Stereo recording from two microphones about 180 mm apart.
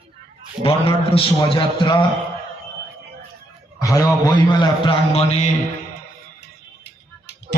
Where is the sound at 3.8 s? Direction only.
20° left (ahead or behind).